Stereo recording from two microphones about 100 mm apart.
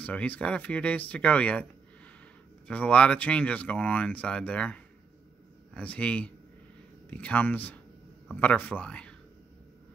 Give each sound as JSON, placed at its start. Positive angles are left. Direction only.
{"t": 0.0, "sound": "speech", "side_deg": 15}
{"t": 2.7, "sound": "speech", "side_deg": 15}